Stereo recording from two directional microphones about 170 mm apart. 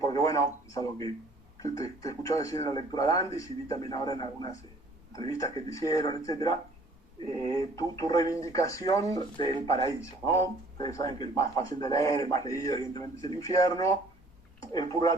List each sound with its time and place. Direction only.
0.0 s speech: 20° left (ahead or behind)